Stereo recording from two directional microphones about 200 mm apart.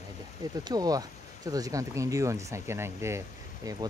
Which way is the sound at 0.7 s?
20° right (ahead or behind).